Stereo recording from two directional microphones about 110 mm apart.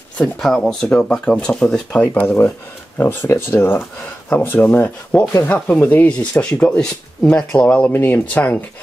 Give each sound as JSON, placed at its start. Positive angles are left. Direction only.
{"t": 0.2, "sound": "speech", "side_deg": 0}